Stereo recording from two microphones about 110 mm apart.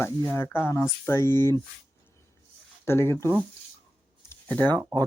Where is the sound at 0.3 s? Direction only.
20° left (ahead or behind).